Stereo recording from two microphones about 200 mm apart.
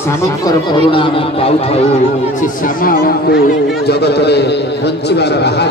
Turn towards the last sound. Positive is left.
turn(degrees=55)  # may be behind; listen again after turning